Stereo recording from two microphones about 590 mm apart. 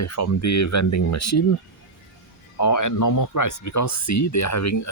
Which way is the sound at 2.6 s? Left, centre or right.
Left.